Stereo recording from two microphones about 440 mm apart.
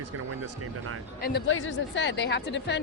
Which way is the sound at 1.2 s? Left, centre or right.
Left.